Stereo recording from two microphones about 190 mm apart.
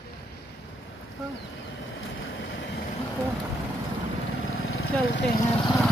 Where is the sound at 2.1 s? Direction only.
90° left.